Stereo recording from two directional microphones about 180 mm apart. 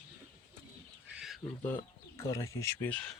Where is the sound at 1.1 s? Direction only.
Centre (ahead or behind).